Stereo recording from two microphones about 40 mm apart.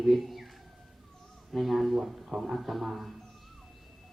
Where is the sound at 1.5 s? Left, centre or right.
Centre.